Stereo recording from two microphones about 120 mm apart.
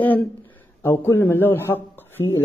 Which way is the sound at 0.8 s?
20° left (ahead or behind).